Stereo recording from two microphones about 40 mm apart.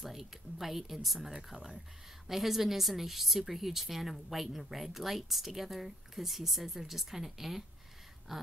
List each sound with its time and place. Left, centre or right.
0.0 s a woman's voice: centre